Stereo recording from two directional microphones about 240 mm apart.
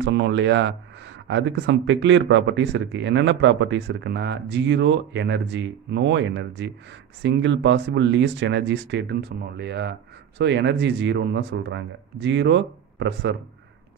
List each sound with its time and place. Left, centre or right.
0.0 s speech: right